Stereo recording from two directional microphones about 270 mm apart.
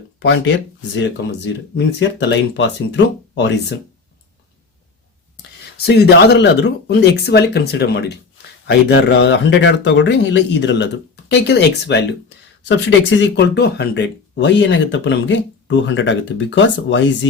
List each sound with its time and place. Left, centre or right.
0.2 s speech: left
5.4 s a sound: left
6.3 s speech: left